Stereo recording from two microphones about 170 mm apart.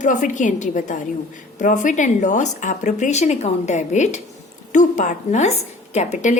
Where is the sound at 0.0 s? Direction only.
45° left (ahead or behind).